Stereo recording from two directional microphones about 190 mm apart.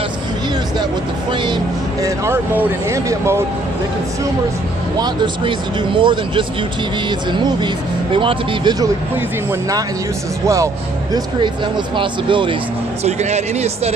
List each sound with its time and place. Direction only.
1.3 s speech: 25° right (ahead or behind)
4.9 s speech: 25° right (ahead or behind)